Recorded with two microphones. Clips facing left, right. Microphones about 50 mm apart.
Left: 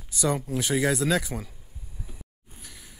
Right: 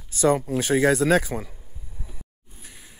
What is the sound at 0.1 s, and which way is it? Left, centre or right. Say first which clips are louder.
Speech: right 6 dB; right.